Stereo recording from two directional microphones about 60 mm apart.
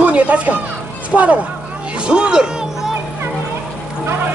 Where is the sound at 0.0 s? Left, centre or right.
Right.